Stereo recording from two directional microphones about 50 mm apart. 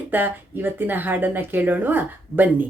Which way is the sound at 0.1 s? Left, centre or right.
Right.